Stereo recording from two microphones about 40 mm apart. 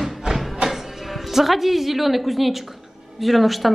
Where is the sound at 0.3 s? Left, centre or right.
Centre.